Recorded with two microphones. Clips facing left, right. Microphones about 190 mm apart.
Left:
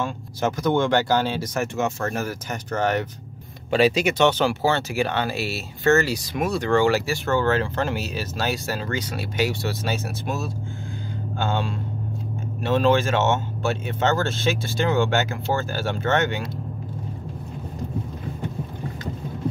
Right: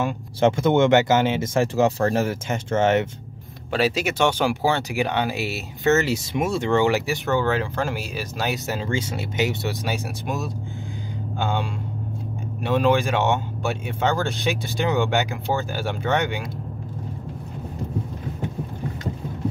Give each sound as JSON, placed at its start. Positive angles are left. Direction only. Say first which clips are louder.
{"t": 0.4, "sound": "speech", "louder": "right 4 dB", "side_deg": -25}
{"t": 3.7, "sound": "speech", "louder": "left 3 dB", "side_deg": -5}